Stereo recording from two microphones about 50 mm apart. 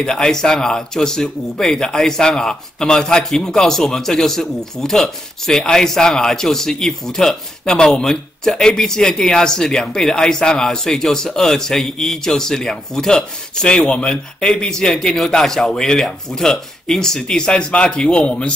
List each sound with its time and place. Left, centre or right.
0.0 s speech: centre